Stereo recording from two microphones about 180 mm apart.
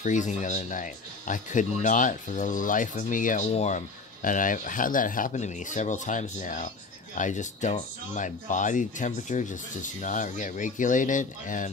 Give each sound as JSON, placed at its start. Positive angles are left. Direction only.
{"t": 0.0, "sound": "speech", "side_deg": 45}